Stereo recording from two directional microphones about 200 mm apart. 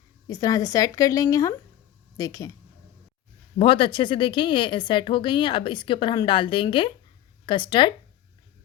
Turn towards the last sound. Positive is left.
turn(degrees=25)  # may be behind; listen again after turning